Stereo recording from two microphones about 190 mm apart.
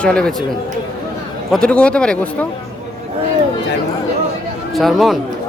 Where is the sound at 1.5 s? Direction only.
5° left (ahead or behind).